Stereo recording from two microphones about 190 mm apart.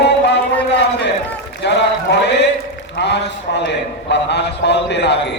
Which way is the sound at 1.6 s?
65° left (ahead or behind).